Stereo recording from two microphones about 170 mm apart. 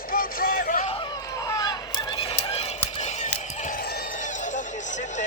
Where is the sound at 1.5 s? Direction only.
20° left (ahead or behind).